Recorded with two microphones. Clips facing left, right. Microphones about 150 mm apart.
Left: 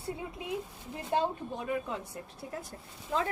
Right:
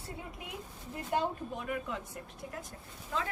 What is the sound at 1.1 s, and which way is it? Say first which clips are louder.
Speech: left 2 dB; 30° left (ahead or behind).